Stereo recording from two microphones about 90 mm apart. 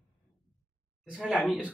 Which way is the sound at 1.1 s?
5° right (ahead or behind).